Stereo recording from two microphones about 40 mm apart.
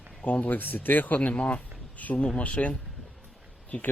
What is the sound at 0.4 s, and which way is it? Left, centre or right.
Speech, left.